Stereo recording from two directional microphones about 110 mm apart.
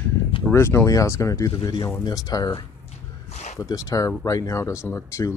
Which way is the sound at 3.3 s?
90° left.